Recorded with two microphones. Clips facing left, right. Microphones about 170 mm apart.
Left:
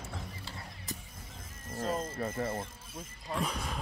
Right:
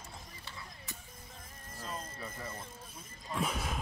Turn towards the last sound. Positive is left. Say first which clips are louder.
# even
turn(degrees=-5)  # may be behind; listen again after turning